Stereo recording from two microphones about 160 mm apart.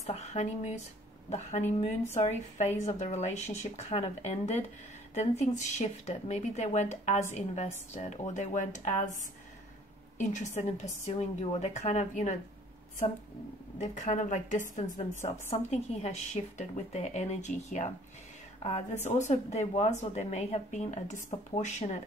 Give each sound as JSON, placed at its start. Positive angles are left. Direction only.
{"t": 0.0, "sound": "a woman's voice", "side_deg": 45}
{"t": 10.1, "sound": "a woman's voice", "side_deg": 50}
{"t": 13.7, "sound": "a woman's voice", "side_deg": 50}